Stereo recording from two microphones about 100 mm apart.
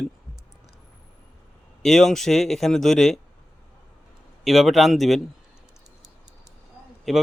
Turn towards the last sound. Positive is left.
turn(degrees=0)  # may be behind; listen again after turning